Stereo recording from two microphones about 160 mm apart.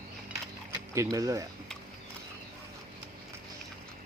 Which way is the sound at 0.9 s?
20° right (ahead or behind).